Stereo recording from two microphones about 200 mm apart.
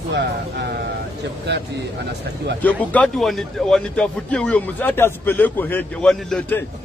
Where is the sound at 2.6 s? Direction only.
5° left (ahead or behind).